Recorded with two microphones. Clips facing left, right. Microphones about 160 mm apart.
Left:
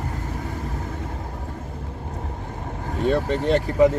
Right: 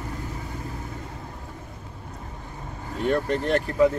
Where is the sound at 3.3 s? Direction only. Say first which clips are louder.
Left 3 dB; 20° left (ahead or behind).